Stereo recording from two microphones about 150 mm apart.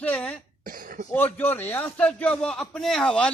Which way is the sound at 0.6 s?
70° right (ahead or behind).